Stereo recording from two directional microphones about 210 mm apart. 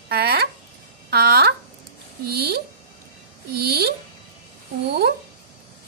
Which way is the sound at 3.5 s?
50° right (ahead or behind).